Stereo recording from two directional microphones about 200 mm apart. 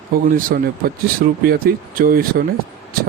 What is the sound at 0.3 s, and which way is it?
A man's voice, 45° right (ahead or behind).